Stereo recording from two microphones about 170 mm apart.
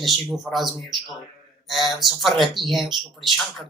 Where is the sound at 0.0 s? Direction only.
Centre (ahead or behind).